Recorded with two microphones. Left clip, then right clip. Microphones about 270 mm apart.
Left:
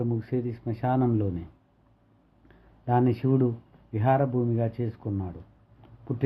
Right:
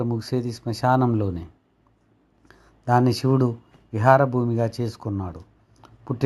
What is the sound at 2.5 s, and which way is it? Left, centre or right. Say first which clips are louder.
Speech: right 6 dB; centre.